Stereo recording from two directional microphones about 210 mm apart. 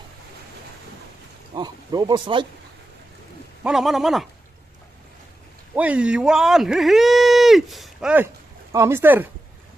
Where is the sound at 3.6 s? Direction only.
Centre (ahead or behind).